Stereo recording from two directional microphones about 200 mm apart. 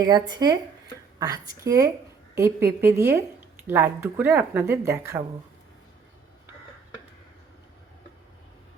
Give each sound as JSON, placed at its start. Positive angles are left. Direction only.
{"t": 0.0, "sound": "speech", "side_deg": -20}